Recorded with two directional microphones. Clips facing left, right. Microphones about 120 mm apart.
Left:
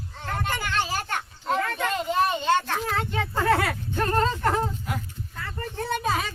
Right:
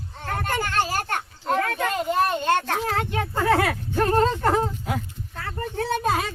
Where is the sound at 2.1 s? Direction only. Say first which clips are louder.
Right 1 dB; centre (ahead or behind).